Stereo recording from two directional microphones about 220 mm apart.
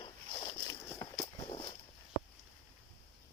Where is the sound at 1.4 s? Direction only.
20° left (ahead or behind).